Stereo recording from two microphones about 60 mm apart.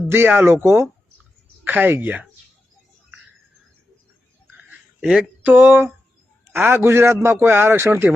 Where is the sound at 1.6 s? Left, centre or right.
Right.